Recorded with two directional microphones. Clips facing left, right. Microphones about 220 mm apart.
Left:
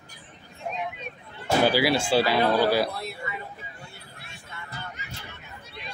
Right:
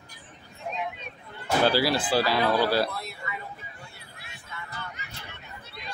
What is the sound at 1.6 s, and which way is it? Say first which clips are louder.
Speech: even; 20° left (ahead or behind).